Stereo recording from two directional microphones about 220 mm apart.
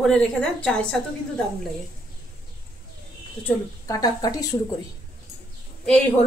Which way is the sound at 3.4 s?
15° left (ahead or behind).